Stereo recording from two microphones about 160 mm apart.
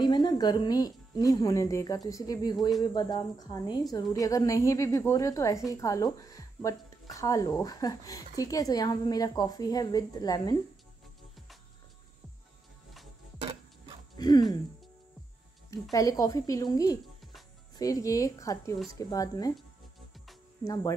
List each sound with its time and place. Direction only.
0.0 s a woman's voice: 25° left (ahead or behind)
13.4 s a sound: 35° right (ahead or behind)
14.1 s speech: 25° left (ahead or behind)
15.7 s a woman's voice: 20° left (ahead or behind)
20.6 s a woman's voice: 20° left (ahead or behind)